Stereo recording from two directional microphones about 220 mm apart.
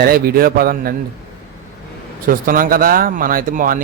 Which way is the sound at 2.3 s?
40° right (ahead or behind).